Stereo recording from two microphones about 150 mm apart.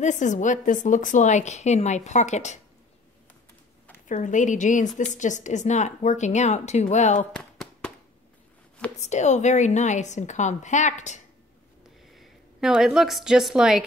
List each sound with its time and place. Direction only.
0.0 s a woman's voice: 55° left (ahead or behind)
4.1 s a woman's voice: 55° left (ahead or behind)
7.3 s a sound: 5° left (ahead or behind)
9.0 s a woman's voice: 50° left (ahead or behind)
12.1 s a woman's voice: centre (ahead or behind)